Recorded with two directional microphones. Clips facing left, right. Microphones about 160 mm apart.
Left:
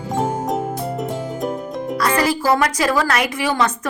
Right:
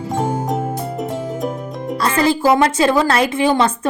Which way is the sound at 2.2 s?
25° right (ahead or behind).